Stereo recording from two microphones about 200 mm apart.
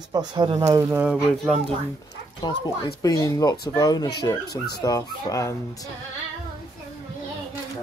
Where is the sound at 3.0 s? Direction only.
15° left (ahead or behind).